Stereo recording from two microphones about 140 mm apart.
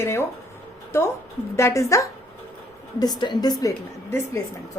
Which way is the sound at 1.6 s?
20° left (ahead or behind).